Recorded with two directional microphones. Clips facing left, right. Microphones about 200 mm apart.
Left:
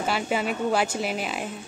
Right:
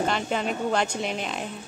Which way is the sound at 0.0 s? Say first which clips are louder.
Even; 5° left (ahead or behind).